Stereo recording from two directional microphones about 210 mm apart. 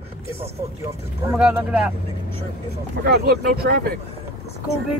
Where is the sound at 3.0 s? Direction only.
50° right (ahead or behind).